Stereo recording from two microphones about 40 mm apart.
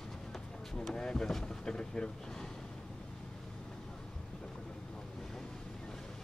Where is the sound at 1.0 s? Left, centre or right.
Centre.